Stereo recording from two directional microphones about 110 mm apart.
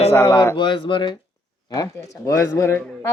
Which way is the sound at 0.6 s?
50° left (ahead or behind).